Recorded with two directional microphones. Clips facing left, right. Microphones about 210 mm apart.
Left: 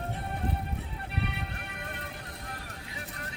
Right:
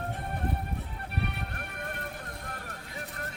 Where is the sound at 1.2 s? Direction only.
50° right (ahead or behind).